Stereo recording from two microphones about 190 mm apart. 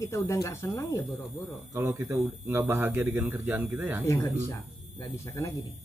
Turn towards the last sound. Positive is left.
turn(degrees=15)  # may be behind; listen again after turning